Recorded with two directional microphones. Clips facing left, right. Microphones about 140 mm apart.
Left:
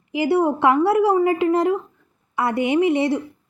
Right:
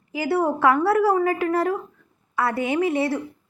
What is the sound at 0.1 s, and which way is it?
Speech, 20° left (ahead or behind).